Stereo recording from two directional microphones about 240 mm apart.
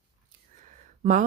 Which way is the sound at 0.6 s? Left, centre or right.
Right.